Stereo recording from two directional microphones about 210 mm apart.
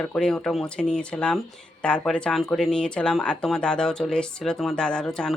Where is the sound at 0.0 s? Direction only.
5° left (ahead or behind).